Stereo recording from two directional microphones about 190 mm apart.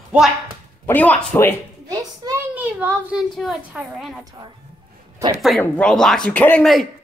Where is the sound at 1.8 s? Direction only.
20° right (ahead or behind).